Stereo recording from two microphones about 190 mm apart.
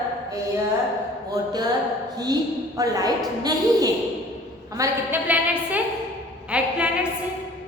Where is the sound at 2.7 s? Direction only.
20° right (ahead or behind).